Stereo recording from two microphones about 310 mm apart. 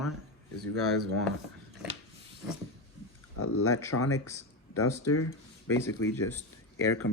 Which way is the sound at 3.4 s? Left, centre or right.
Left.